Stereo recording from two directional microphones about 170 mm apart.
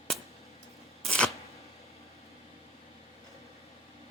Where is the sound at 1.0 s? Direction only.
5° left (ahead or behind).